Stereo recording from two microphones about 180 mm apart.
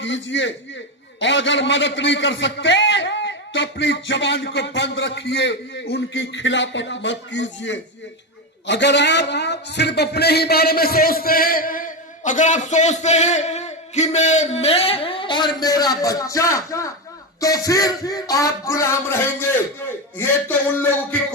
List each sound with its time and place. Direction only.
0.0 s a man's voice: 90° left
8.6 s a man's voice: 75° left (ahead or behind); by 16.9 s 15° left (ahead or behind)
17.4 s music: 20° left (ahead or behind)
20.1 s a sound: 10° left (ahead or behind)